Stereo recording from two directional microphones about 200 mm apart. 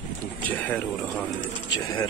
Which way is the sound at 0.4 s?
5° left (ahead or behind).